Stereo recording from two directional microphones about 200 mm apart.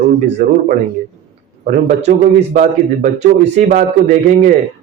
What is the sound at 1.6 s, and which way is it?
Speech, 45° right (ahead or behind).